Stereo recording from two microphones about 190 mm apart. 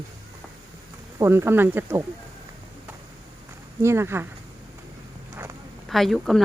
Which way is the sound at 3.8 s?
15° right (ahead or behind).